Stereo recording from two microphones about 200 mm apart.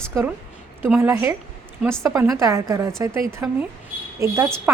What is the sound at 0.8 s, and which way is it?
A woman's voice, 10° right (ahead or behind).